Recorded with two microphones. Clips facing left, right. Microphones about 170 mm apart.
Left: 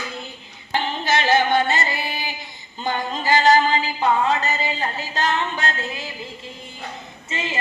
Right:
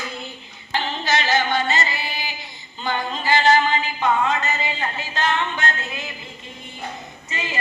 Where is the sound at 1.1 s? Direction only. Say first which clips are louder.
Left 3 dB; 55° left (ahead or behind).